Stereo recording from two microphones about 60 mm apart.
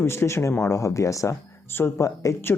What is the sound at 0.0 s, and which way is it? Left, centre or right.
Speech, left.